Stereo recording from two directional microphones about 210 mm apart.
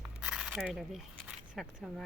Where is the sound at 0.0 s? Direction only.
5° right (ahead or behind).